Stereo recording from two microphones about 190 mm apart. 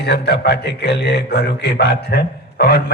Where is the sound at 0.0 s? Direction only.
60° left (ahead or behind).